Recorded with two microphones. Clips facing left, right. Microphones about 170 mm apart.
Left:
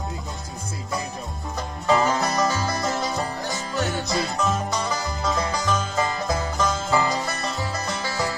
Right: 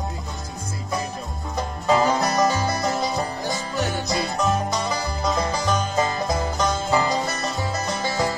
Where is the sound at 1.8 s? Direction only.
10° right (ahead or behind).